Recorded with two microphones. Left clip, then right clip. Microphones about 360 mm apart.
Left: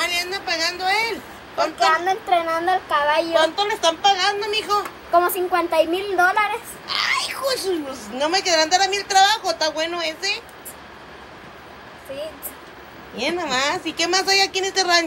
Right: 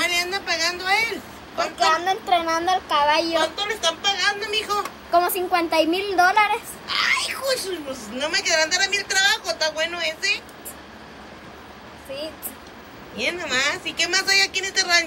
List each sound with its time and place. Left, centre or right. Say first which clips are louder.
0.0 s a sound: even; centre
2.3 s a woman's voice: left 1 dB; centre
3.5 s a woman's voice: left 4 dB; centre
5.1 s a woman's voice: left 2 dB; centre
6.9 s speech: even; centre
13.2 s a woman's voice: left 1 dB; centre